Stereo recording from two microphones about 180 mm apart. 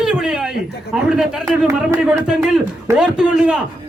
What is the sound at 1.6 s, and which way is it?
Speech, 15° right (ahead or behind).